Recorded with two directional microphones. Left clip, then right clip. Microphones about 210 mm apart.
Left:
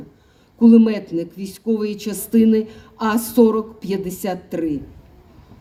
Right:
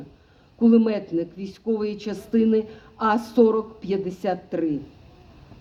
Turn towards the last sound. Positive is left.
turn(degrees=55)  # may be behind; listen again after turning